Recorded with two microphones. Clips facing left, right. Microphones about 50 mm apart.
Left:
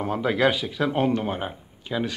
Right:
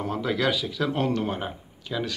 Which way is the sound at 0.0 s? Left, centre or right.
Left.